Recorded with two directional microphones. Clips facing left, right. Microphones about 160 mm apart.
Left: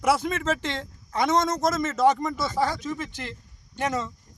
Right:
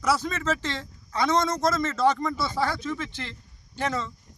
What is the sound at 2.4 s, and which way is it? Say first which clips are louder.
Speech: left 1 dB; 45° left (ahead or behind).